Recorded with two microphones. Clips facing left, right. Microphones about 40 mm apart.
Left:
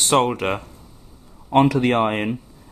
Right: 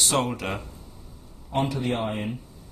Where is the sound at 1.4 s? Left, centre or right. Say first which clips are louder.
Left 10 dB; left.